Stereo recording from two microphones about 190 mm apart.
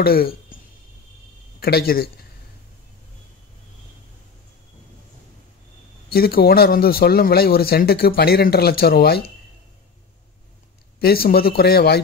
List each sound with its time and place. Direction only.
0.0 s speech: 50° left (ahead or behind)
1.6 s speech: 55° left (ahead or behind)
6.0 s speech: 55° left (ahead or behind)
11.0 s speech: 55° left (ahead or behind)